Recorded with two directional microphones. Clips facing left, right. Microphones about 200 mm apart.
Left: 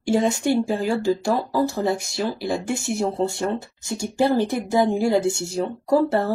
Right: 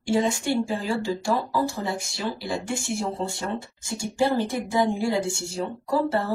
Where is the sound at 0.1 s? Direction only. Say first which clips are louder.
Left 3 dB; 45° left (ahead or behind).